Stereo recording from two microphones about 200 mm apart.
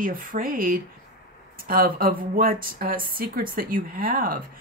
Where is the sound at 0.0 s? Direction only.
45° right (ahead or behind).